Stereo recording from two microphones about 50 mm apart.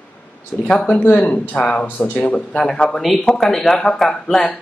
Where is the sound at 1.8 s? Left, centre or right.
Left.